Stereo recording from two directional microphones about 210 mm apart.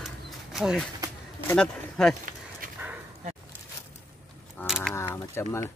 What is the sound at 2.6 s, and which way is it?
Dog, 40° right (ahead or behind).